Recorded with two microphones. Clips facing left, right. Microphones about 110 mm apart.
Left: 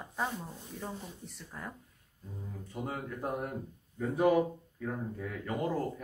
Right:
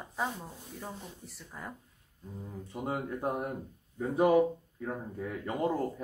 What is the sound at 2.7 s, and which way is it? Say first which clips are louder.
Speech: right 4 dB; 20° right (ahead or behind).